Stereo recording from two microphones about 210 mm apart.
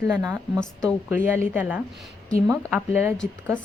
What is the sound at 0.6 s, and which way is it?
Speech, 5° left (ahead or behind).